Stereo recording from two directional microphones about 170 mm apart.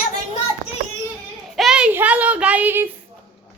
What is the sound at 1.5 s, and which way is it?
Child singing, 5° right (ahead or behind).